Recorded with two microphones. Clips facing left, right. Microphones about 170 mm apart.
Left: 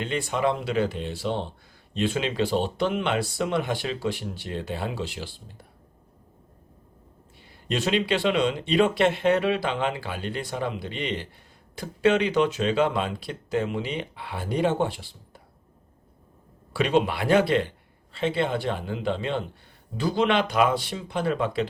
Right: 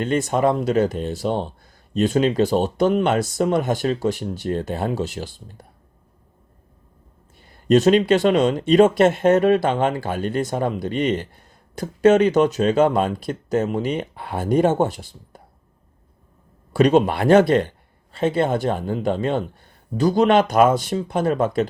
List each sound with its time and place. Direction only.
0.0 s speech: 45° right (ahead or behind)
7.3 s speech: 45° right (ahead or behind)
16.7 s speech: 45° right (ahead or behind)